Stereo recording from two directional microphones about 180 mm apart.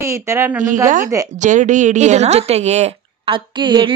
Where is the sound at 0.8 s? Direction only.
45° right (ahead or behind).